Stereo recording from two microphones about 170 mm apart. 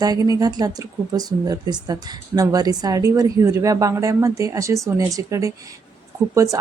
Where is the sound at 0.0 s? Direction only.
20° right (ahead or behind).